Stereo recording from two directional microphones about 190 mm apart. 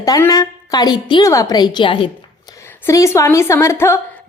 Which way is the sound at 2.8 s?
15° left (ahead or behind).